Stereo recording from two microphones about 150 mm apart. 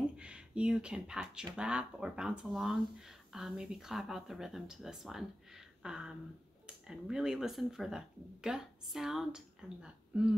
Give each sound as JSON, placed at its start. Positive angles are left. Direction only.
{"t": 0.2, "sound": "speech", "side_deg": -5}
{"t": 5.8, "sound": "a sound", "side_deg": -5}
{"t": 6.9, "sound": "speech", "side_deg": -5}